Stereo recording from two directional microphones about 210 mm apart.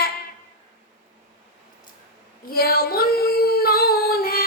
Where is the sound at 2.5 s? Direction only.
45° left (ahead or behind).